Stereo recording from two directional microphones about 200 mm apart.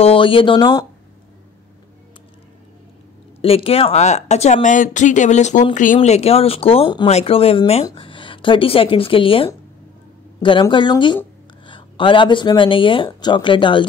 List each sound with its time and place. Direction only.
0.0 s speech: 25° left (ahead or behind)
3.3 s speech: 30° left (ahead or behind)